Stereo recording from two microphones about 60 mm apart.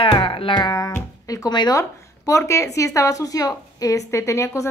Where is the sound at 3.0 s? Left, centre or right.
Left.